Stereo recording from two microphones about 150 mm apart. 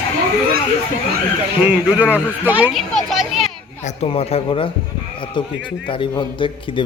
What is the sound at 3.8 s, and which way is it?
A man's voice, 40° left (ahead or behind).